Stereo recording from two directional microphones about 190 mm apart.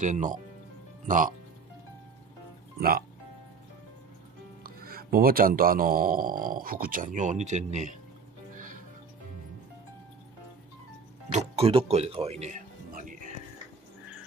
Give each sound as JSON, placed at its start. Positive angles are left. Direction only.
{"t": 0.0, "sound": "speech", "side_deg": -40}
{"t": 4.6, "sound": "speech", "side_deg": -50}
{"t": 8.5, "sound": "music", "side_deg": -45}
{"t": 11.3, "sound": "speech", "side_deg": -30}